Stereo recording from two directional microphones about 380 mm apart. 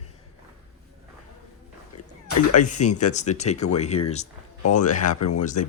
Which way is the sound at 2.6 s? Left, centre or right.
Centre.